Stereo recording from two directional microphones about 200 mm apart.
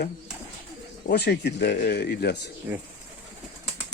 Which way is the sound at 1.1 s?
55° left (ahead or behind).